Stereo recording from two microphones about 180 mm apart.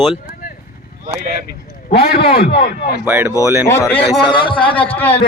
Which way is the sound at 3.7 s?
15° left (ahead or behind).